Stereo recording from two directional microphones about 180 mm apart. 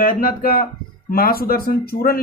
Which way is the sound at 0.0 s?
50° left (ahead or behind).